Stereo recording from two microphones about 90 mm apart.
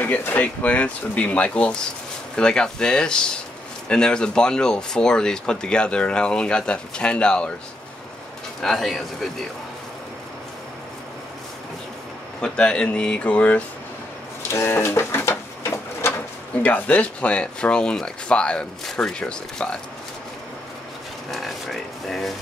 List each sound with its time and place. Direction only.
0.0 s speech: 20° left (ahead or behind)
8.6 s speech: 5° left (ahead or behind)
12.4 s speech: 10° left (ahead or behind)
14.5 s a sound: 30° left (ahead or behind)
16.6 s speech: 20° left (ahead or behind)
21.3 s a sound: centre (ahead or behind)